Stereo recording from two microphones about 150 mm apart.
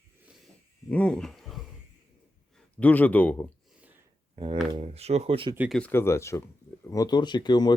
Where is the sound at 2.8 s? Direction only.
10° left (ahead or behind).